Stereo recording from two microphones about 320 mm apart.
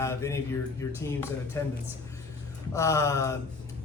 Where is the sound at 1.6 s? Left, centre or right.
Centre.